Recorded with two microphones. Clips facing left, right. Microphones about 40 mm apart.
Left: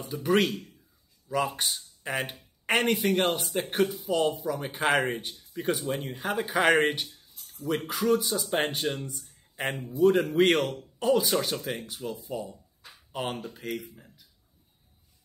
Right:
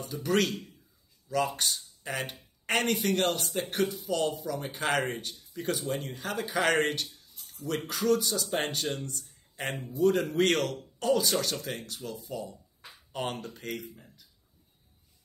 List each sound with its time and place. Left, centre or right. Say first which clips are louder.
0.0 s speech: left 3 dB; centre
13.1 s speech: left 1 dB; centre